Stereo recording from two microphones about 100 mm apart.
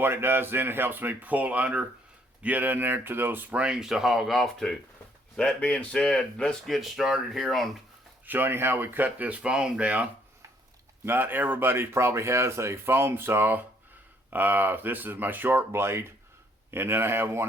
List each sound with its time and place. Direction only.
0.0 s speech: 20° right (ahead or behind); by 7.7 s centre (ahead or behind)
8.3 s speech: 20° right (ahead or behind)